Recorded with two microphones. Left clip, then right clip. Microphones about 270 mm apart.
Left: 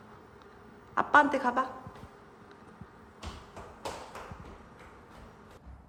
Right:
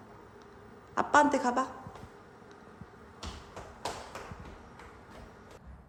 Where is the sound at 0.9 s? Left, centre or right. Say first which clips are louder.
Left 1 dB; centre.